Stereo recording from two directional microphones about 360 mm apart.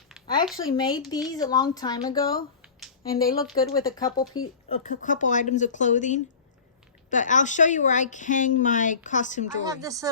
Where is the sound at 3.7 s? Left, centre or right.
Centre.